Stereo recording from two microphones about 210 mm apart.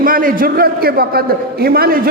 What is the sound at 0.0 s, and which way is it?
A man's voice, 40° right (ahead or behind).